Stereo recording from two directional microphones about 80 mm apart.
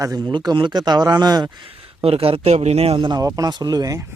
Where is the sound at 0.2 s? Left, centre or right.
Right.